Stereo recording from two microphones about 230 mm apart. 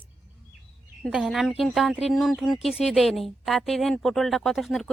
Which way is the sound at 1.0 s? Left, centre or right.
Centre.